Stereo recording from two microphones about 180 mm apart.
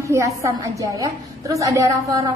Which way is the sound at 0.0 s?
15° right (ahead or behind).